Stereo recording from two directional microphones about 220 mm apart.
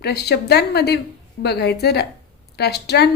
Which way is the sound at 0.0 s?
50° left (ahead or behind).